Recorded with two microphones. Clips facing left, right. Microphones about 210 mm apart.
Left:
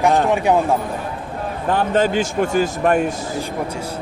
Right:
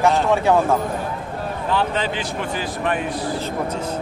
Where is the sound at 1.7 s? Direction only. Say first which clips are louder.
Left 6 dB; 45° left (ahead or behind).